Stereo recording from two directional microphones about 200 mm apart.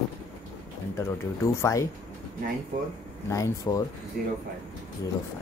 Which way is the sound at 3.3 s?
15° left (ahead or behind).